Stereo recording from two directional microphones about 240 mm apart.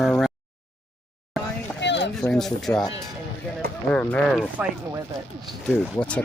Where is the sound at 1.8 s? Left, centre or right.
Left.